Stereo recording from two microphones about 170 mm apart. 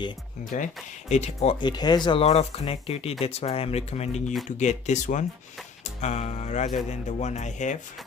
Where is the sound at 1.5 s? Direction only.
25° left (ahead or behind).